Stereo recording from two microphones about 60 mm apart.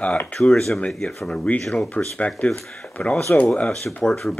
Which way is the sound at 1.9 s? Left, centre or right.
Left.